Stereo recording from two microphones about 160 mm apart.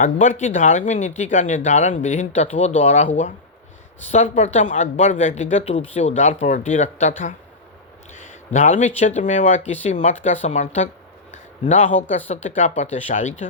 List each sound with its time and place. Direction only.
0.0 s speech: 50° left (ahead or behind)
8.5 s speech: 50° left (ahead or behind)
11.3 s a sound: 50° left (ahead or behind)
12.3 s speech: 45° left (ahead or behind)